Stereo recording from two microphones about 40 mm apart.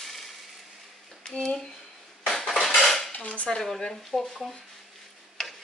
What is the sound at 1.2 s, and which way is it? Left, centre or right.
Speech, centre.